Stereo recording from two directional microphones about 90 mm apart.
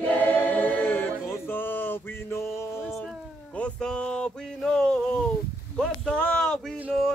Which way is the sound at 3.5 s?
10° left (ahead or behind).